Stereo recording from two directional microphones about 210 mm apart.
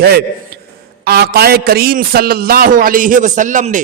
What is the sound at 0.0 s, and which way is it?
A man's voice, 50° right (ahead or behind).